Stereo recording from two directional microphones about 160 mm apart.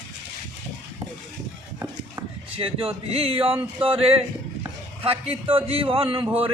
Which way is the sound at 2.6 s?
35° right (ahead or behind).